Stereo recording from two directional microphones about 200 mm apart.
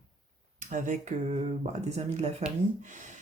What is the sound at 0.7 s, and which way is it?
Speech, 40° right (ahead or behind).